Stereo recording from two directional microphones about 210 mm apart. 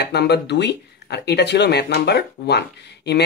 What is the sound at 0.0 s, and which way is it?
Speech, 55° left (ahead or behind).